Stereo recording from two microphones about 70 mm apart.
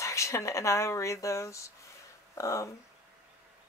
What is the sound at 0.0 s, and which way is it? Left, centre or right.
Speech, left.